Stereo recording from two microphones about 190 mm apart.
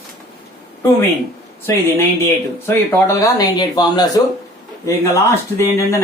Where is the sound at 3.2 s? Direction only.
20° left (ahead or behind).